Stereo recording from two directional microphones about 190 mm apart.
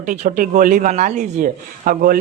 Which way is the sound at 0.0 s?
45° right (ahead or behind).